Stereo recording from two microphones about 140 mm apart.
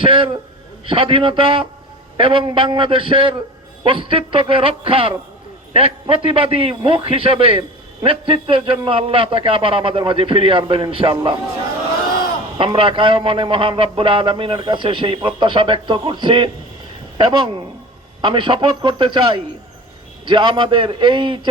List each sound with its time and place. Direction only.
0.0 s a sound: 40° right (ahead or behind)
0.9 s a man's voice: 40° right (ahead or behind)
12.5 s a man's voice: 40° right (ahead or behind)